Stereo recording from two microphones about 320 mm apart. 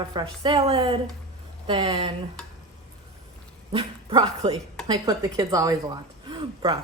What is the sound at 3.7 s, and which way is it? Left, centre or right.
Speech, centre.